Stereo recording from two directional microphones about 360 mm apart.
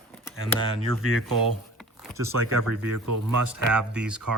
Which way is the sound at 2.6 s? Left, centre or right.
Right.